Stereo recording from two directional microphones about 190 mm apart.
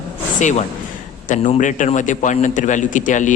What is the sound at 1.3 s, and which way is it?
A man's voice, 40° left (ahead or behind).